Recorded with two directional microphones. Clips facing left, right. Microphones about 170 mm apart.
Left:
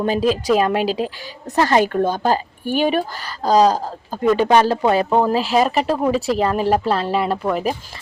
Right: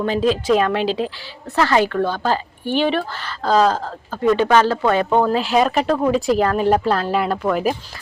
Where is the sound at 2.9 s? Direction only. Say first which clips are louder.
Left 1 dB; 15° left (ahead or behind).